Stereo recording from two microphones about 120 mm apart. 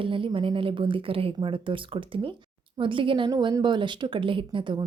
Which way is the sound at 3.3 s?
35° right (ahead or behind).